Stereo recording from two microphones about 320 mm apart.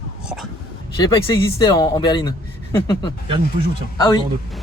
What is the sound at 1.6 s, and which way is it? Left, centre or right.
A man's voice, centre.